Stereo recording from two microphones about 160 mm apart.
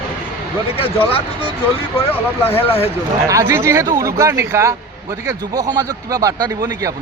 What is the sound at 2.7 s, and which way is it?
Speech, 35° left (ahead or behind).